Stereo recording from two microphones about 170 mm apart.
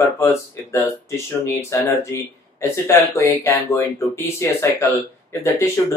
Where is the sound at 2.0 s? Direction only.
15° left (ahead or behind).